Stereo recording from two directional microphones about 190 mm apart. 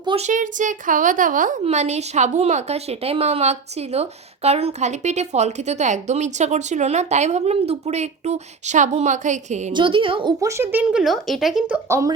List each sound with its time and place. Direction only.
0.0 s speech: 25° right (ahead or behind)
0.3 s a woman's voice: 40° right (ahead or behind)
9.7 s a woman's voice: 25° right (ahead or behind)